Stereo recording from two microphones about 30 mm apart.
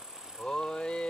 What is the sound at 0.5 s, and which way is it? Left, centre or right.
Speech, left.